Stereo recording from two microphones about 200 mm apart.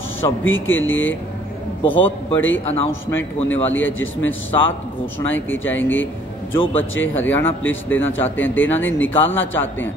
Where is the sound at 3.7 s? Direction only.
75° left (ahead or behind).